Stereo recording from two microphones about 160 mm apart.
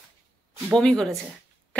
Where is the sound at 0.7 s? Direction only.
5° left (ahead or behind).